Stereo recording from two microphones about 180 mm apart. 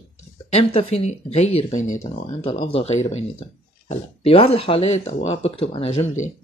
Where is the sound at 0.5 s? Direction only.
35° left (ahead or behind).